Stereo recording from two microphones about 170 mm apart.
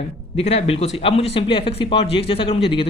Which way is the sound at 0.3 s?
35° left (ahead or behind).